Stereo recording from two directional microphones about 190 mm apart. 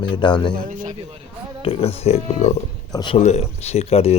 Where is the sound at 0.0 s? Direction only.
25° left (ahead or behind).